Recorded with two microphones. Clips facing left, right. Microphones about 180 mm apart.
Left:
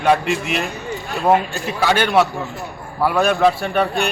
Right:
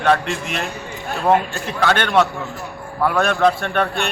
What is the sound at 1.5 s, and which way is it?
A man's voice, centre (ahead or behind).